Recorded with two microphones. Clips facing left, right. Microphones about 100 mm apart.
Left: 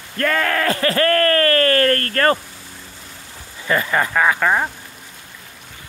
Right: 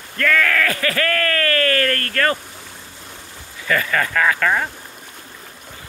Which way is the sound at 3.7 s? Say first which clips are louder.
Left 1 dB; 25° left (ahead or behind).